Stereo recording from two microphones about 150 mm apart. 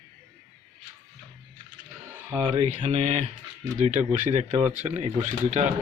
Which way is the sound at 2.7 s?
50° right (ahead or behind).